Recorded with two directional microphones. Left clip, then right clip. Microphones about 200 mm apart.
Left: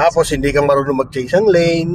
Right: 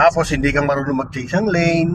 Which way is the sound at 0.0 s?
30° left (ahead or behind).